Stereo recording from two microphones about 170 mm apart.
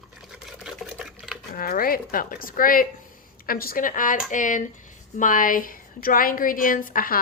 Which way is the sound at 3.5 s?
60° left (ahead or behind).